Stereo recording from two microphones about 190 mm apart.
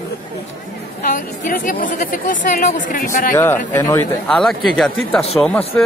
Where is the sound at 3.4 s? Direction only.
10° left (ahead or behind).